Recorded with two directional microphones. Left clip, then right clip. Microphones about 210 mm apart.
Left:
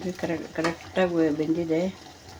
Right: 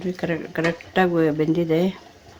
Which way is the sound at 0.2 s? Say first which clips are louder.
Right 3 dB; 30° right (ahead or behind).